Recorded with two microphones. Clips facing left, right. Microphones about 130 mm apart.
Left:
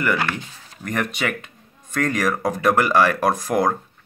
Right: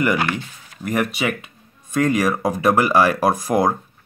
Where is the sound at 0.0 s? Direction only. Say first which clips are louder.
Right 3 dB; 15° right (ahead or behind).